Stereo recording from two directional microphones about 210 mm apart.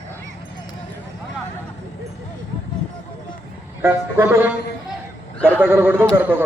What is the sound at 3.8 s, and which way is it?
A man's voice, 10° right (ahead or behind).